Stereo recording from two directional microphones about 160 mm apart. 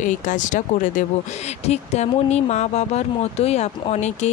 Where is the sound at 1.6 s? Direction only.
40° left (ahead or behind).